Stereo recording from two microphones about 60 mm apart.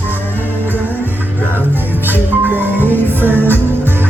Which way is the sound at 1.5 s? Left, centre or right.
Right.